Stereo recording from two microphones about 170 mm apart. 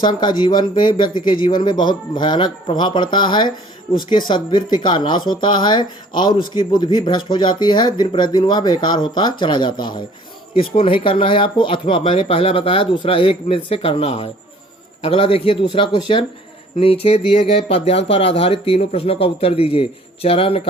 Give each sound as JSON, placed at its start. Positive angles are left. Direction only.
{"t": 0.0, "sound": "speech", "side_deg": 25}